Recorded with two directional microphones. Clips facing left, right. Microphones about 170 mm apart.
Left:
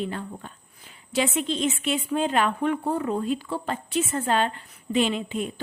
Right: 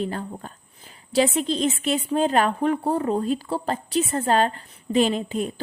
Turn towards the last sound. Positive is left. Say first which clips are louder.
# right 3 dB
turn(degrees=-40)  # may be behind; listen again after turning